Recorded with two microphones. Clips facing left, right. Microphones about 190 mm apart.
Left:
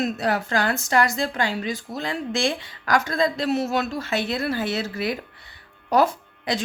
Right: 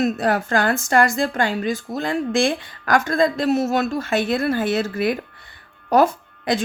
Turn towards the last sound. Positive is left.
turn(degrees=-50)  # may be behind; listen again after turning